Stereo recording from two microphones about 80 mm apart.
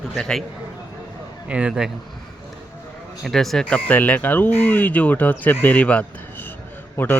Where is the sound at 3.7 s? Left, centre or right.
Centre.